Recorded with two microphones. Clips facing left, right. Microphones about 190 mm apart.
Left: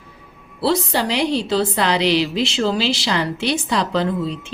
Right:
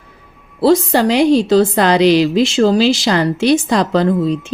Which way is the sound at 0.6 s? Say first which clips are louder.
Right 8 dB; 45° right (ahead or behind).